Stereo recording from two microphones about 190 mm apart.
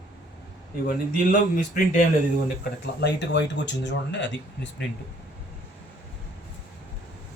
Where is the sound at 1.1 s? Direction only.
45° left (ahead or behind).